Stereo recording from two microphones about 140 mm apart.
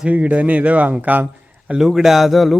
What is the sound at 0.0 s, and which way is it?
A man's voice, 10° right (ahead or behind).